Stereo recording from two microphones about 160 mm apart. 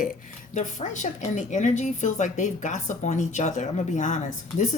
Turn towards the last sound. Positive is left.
turn(degrees=50)  # may be behind; listen again after turning